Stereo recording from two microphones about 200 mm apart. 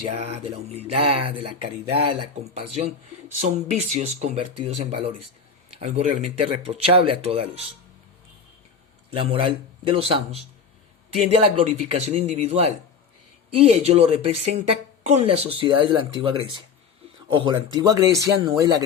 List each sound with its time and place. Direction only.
0.2 s speech: 30° right (ahead or behind)
9.1 s speech: 25° right (ahead or behind)